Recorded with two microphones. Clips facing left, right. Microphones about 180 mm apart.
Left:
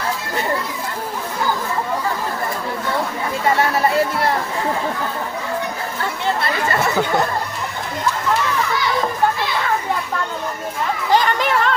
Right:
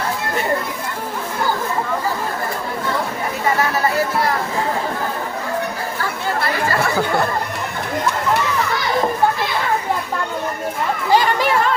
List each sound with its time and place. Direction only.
3.4 s a sound: 25° left (ahead or behind)
6.0 s chatter: 25° left (ahead or behind)
11.1 s chatter: 10° right (ahead or behind)